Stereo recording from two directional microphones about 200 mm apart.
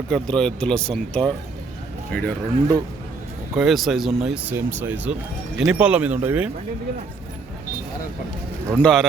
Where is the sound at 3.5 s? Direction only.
Centre (ahead or behind).